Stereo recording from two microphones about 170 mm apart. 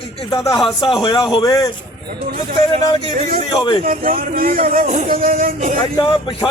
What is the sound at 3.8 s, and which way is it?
Speech, 55° right (ahead or behind).